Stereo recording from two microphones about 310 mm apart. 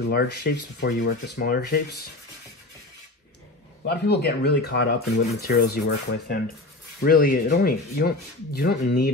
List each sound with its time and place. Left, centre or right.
0.1 s speech: left
3.8 s speech: left